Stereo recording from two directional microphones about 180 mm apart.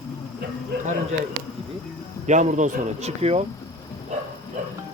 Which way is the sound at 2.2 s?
40° right (ahead or behind).